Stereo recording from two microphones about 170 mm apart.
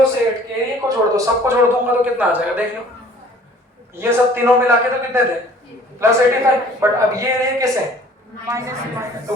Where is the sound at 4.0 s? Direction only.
15° right (ahead or behind).